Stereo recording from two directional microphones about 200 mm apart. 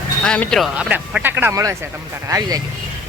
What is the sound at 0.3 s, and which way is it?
Speech, 5° left (ahead or behind).